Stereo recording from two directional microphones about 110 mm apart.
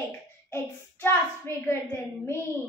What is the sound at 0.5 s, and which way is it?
Child singing, 20° left (ahead or behind).